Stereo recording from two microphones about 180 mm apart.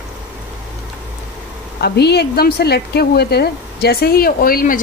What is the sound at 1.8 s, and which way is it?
A woman's voice, 65° left (ahead or behind).